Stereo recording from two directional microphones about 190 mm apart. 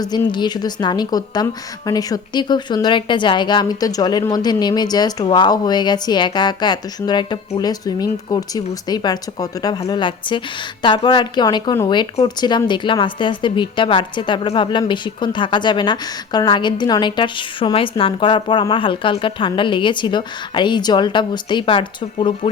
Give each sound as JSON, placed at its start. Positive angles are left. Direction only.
{"t": 0.0, "sound": "a woman's voice", "side_deg": 20}